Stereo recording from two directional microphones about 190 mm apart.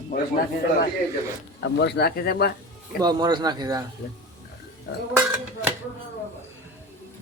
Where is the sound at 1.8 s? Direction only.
55° left (ahead or behind).